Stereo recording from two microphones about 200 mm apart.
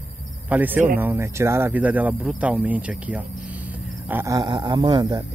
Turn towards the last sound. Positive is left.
turn(degrees=-20)  # may be behind; listen again after turning